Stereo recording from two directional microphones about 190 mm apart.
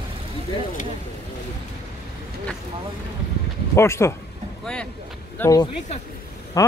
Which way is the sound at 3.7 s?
15° left (ahead or behind).